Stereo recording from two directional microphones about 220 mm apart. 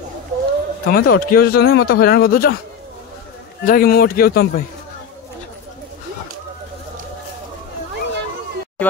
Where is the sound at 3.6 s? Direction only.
40° left (ahead or behind).